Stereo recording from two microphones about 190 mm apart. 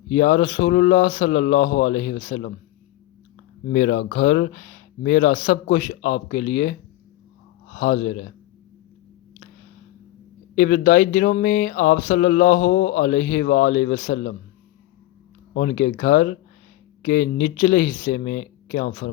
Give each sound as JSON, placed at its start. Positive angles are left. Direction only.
{"t": 0.1, "sound": "speech", "side_deg": 50}
{"t": 3.7, "sound": "speech", "side_deg": 55}
{"t": 10.5, "sound": "speech", "side_deg": 45}
{"t": 15.5, "sound": "speech", "side_deg": 50}